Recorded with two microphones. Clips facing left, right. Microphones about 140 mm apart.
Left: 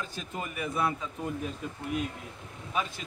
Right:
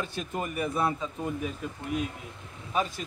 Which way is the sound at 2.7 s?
35° right (ahead or behind).